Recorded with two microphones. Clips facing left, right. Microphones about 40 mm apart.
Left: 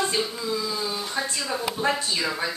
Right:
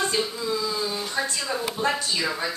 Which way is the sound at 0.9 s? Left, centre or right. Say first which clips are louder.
Right 1 dB; centre.